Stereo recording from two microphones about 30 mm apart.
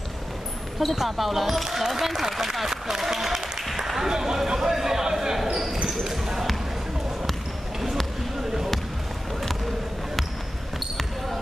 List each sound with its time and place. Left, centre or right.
0.7 s speech: centre
3.7 s applause: centre
4.1 s speech: centre
4.4 s a sound: centre
5.5 s basketball bounce: centre